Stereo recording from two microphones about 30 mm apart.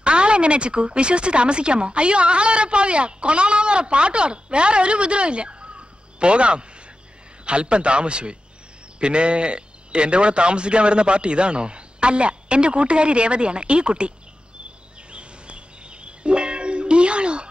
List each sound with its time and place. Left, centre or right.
0.0 s speech: right
15.1 s music: right